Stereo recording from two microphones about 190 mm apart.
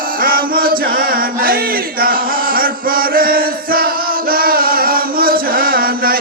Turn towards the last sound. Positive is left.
turn(degrees=-50)  # may be behind; listen again after turning